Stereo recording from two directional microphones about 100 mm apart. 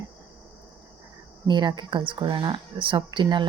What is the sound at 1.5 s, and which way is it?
Speech, 50° right (ahead or behind).